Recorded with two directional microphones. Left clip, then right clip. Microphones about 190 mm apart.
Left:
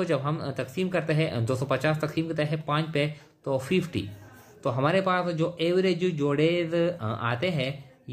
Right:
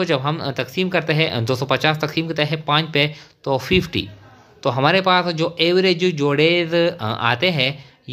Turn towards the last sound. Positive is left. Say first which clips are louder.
# right 10 dB
turn(degrees=-40)  # may be behind; listen again after turning